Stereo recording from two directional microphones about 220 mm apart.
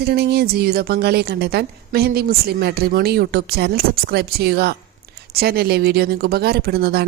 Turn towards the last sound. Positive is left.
turn(degrees=-45)  # may be behind; listen again after turning